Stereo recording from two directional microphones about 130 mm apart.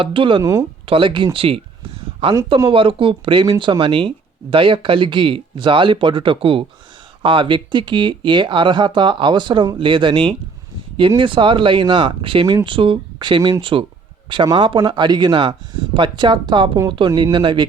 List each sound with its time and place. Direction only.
0.0 s speech: 40° right (ahead or behind)